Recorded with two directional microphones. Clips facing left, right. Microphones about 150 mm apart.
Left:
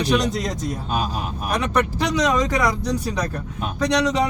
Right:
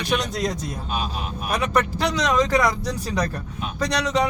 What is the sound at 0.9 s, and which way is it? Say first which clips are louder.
Speech: left 3 dB; 40° left (ahead or behind).